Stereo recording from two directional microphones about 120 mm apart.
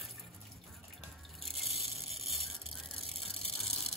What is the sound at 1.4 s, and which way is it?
Vehicle, centre (ahead or behind).